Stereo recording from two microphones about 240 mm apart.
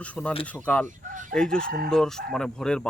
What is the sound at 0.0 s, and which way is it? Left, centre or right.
Speech, centre.